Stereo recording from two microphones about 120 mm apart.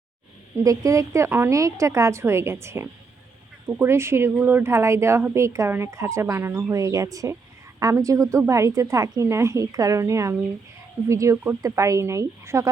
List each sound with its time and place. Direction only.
0.6 s speech: 30° right (ahead or behind)